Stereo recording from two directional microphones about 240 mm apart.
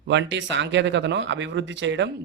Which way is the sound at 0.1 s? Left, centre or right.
Right.